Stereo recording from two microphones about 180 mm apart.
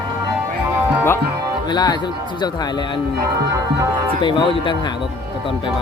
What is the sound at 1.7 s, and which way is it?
Music, 25° left (ahead or behind).